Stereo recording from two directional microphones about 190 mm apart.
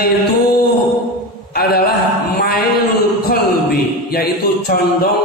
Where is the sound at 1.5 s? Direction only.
55° left (ahead or behind).